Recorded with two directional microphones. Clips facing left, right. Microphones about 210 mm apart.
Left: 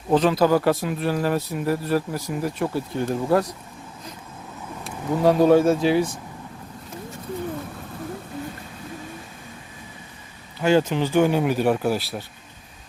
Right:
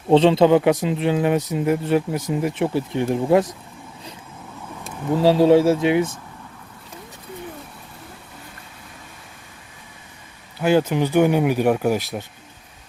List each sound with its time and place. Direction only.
0.1 s speech: 25° right (ahead or behind)
5.2 s speech: 30° right (ahead or behind)
10.6 s speech: 10° right (ahead or behind)